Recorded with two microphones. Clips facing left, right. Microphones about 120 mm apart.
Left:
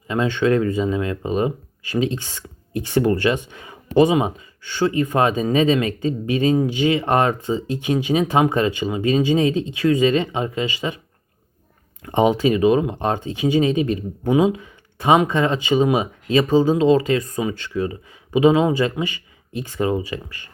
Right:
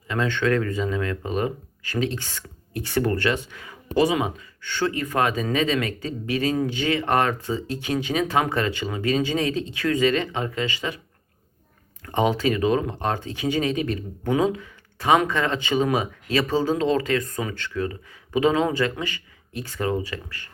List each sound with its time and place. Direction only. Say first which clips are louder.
0.1 s speech: left 4 dB; 15° left (ahead or behind)
12.0 s speech: left 5 dB; 20° left (ahead or behind)